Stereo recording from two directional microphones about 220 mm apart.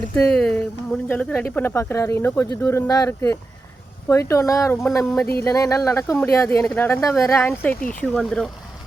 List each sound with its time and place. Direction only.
0.2 s speech: 5° left (ahead or behind)